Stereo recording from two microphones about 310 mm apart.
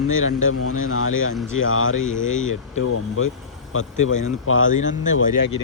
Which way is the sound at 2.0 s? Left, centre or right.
Left.